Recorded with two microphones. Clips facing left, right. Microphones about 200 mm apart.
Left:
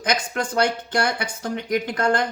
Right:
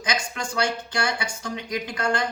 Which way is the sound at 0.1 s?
55° left (ahead or behind).